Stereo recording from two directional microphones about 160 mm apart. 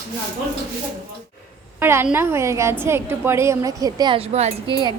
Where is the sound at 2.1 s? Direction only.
15° right (ahead or behind); by 4.8 s 40° right (ahead or behind).